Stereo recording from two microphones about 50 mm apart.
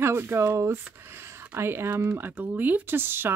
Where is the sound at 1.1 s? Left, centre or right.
Right.